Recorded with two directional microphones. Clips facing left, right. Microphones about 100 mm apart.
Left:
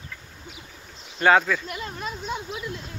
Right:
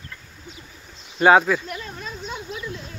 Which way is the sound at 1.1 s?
15° right (ahead or behind).